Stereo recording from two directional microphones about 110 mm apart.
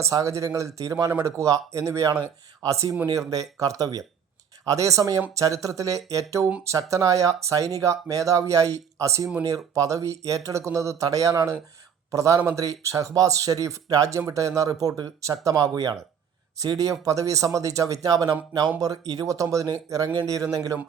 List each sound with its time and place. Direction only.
0.0 s a man's voice: 30° right (ahead or behind)